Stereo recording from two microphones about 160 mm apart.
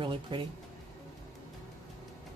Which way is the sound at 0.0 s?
30° right (ahead or behind).